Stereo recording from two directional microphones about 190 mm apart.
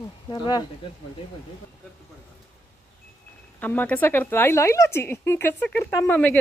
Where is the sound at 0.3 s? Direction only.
20° left (ahead or behind).